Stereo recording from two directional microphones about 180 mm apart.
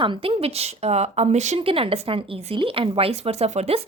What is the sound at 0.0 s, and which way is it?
Speech, 30° right (ahead or behind).